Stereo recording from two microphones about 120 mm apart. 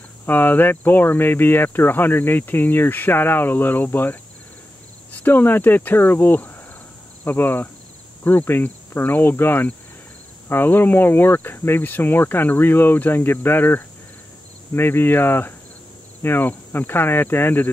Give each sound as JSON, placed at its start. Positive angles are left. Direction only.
{"t": 0.3, "sound": "speech", "side_deg": 15}